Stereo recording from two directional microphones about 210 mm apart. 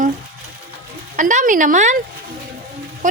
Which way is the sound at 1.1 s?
35° right (ahead or behind).